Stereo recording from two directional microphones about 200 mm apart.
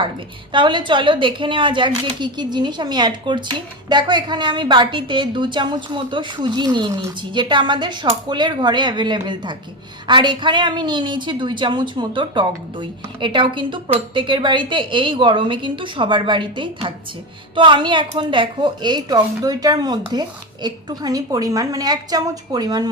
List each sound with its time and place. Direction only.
0.5 s a woman's voice: 25° right (ahead or behind)